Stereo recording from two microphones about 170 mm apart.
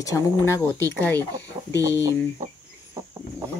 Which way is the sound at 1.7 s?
20° right (ahead or behind).